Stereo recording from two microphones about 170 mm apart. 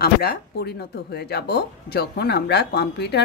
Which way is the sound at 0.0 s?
70° left (ahead or behind).